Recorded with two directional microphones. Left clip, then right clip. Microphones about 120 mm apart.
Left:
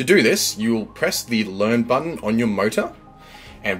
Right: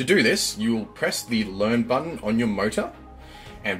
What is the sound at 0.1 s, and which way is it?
Speech, 30° left (ahead or behind).